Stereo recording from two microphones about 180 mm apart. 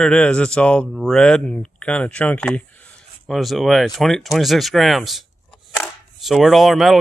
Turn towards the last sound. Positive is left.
turn(degrees=0)  # may be behind; listen again after turning